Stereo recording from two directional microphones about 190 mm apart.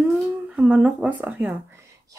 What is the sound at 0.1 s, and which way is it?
Humming, 5° right (ahead or behind).